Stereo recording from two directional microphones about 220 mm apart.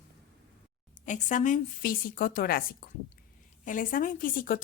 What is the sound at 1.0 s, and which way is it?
Speech, 35° left (ahead or behind).